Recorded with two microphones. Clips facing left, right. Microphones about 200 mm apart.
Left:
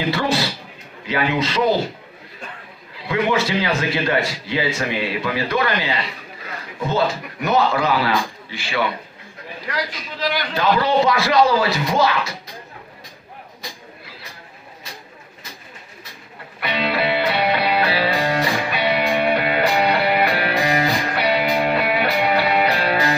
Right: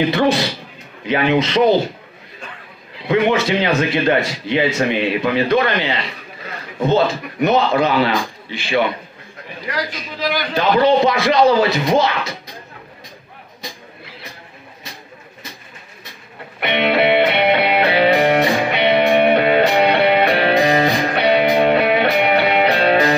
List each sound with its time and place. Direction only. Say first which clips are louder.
0.1 s a man's voice: right 5 dB; 20° right (ahead or behind)
3.0 s a man's voice: right 4 dB; 20° right (ahead or behind)
10.5 s a man's voice: right 5 dB; 20° right (ahead or behind)
16.6 s music: right 6 dB; 25° right (ahead or behind)